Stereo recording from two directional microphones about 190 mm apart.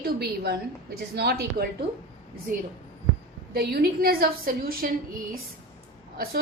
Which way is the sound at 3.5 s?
55° right (ahead or behind).